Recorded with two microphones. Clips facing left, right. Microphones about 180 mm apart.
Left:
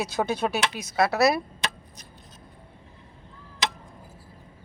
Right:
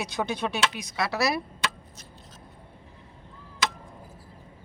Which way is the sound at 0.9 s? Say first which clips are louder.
Left 8 dB; 55° left (ahead or behind).